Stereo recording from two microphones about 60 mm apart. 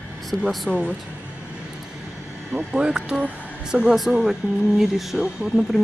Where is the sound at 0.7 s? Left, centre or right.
Centre.